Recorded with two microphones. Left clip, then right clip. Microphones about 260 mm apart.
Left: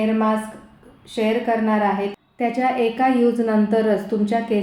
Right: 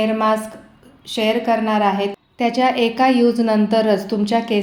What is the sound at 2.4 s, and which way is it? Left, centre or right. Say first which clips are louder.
A woman's voice: right 3 dB; right.